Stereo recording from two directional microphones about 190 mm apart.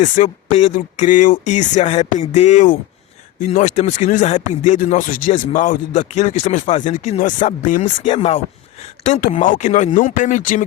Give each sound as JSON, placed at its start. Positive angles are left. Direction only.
{"t": 0.0, "sound": "speech", "side_deg": 40}
{"t": 8.8, "sound": "a sound", "side_deg": 35}
{"t": 9.3, "sound": "speech", "side_deg": 40}